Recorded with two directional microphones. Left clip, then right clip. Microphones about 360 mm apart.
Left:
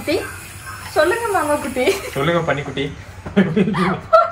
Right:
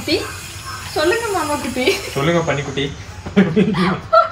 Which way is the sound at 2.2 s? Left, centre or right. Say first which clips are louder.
Even; centre.